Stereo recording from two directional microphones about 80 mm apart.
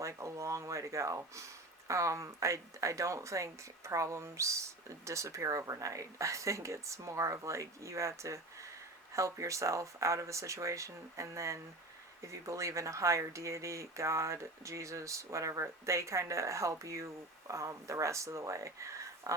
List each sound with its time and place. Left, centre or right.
0.0 s speech: right